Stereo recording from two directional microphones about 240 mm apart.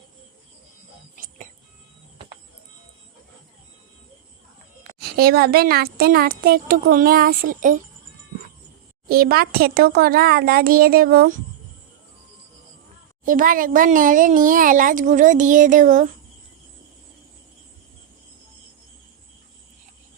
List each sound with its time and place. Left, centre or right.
4.9 s a child's voice: right
9.0 s a child's voice: right
13.2 s a child's voice: right